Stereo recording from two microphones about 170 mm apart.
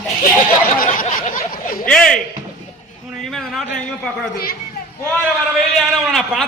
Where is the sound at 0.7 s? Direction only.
50° left (ahead or behind).